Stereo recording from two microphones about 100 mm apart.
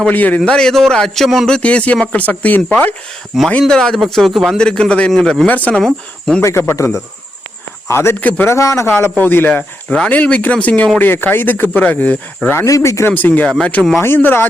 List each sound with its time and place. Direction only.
0.0 s a man's voice: 15° left (ahead or behind)
3.6 s a man's voice: 5° left (ahead or behind)
5.5 s a man's voice: 15° left (ahead or behind)
5.8 s speech: 5° left (ahead or behind)
6.4 s speech: 25° left (ahead or behind)
8.5 s a man's voice: 30° left (ahead or behind)
12.6 s speech: 35° left (ahead or behind)
13.1 s a man's voice: 20° left (ahead or behind)